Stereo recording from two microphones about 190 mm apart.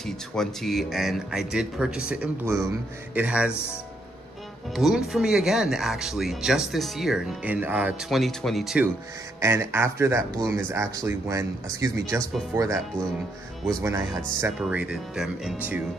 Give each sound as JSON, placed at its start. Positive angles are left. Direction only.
{"t": 0.0, "sound": "speech", "side_deg": 0}
{"t": 4.7, "sound": "speech", "side_deg": 0}
{"t": 9.4, "sound": "speech", "side_deg": -15}
{"t": 13.7, "sound": "speech", "side_deg": -20}
{"t": 14.6, "sound": "speech", "side_deg": -5}